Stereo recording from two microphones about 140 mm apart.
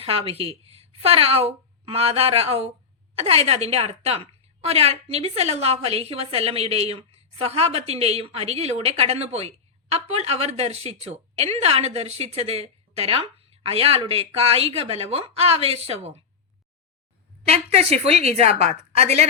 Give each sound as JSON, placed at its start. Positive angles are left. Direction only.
{"t": 0.0, "sound": "a woman's voice", "side_deg": -45}
{"t": 17.5, "sound": "a woman's voice", "side_deg": -50}